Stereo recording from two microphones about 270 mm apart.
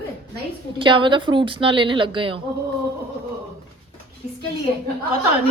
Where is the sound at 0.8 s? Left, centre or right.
Centre.